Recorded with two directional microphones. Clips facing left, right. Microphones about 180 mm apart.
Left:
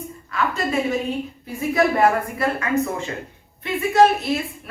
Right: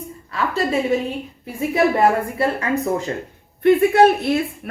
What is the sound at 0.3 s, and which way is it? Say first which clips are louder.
Speech: right 2 dB; 30° right (ahead or behind).